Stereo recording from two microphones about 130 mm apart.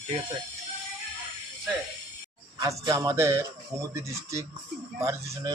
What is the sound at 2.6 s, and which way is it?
Speech, 25° right (ahead or behind).